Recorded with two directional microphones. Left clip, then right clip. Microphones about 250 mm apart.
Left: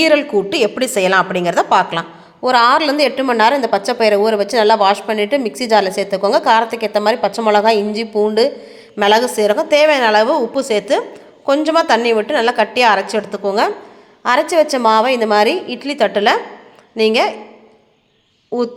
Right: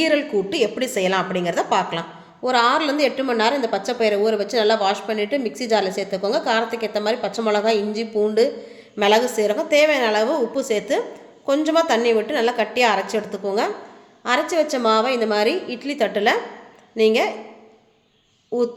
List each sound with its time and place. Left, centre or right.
0.0 s a woman's voice: centre